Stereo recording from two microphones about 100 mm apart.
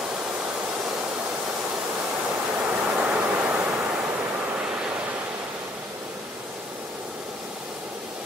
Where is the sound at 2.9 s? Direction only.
15° right (ahead or behind).